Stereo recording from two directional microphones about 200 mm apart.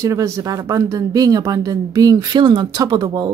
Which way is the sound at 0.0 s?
15° right (ahead or behind).